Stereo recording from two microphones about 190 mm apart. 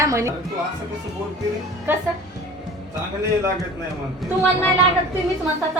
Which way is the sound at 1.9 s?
10° right (ahead or behind).